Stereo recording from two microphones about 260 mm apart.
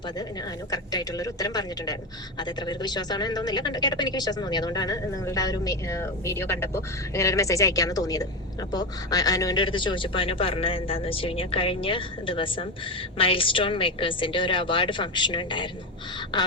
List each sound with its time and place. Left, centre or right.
0.7 s speech: centre